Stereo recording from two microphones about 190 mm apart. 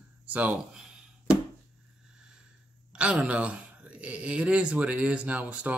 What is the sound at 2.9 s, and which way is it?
Speech, 5° right (ahead or behind).